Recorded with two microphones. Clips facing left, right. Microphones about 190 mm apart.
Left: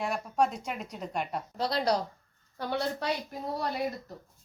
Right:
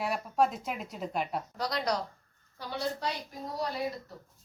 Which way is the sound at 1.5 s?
30° left (ahead or behind).